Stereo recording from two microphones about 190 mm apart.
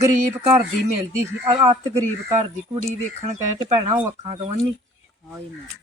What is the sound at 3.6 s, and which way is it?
Speech, 35° right (ahead or behind).